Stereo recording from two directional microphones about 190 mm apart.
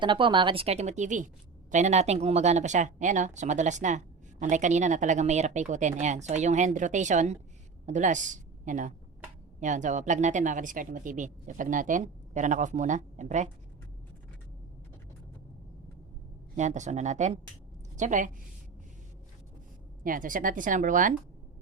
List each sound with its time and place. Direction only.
0.0 s a woman's voice: 25° right (ahead or behind)
16.6 s a woman's voice: 40° right (ahead or behind)
20.1 s speech: 45° right (ahead or behind)